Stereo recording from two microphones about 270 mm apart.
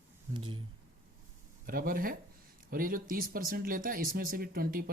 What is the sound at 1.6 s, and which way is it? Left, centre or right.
Speech, right.